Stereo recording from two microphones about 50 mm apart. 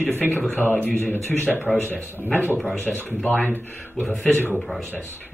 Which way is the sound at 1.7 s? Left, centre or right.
Left.